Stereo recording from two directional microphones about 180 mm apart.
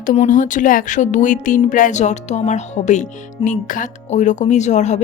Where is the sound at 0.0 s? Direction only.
45° left (ahead or behind).